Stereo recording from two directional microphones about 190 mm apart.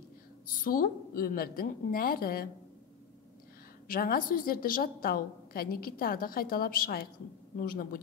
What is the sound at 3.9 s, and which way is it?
A woman's voice, 50° left (ahead or behind).